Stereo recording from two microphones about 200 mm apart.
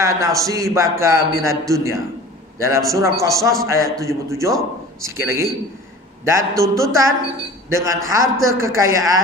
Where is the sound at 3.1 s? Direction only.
15° right (ahead or behind).